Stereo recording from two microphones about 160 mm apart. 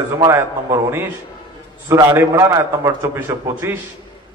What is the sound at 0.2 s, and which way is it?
A man's voice, 15° right (ahead or behind).